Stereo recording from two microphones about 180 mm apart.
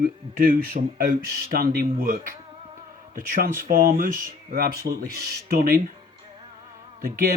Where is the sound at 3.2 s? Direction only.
50° right (ahead or behind).